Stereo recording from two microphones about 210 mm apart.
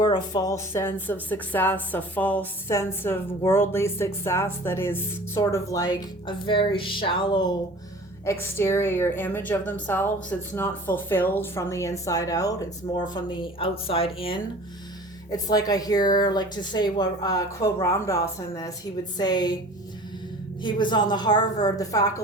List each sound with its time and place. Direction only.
0.0 s speech: 20° left (ahead or behind)
20.6 s speech: 20° left (ahead or behind)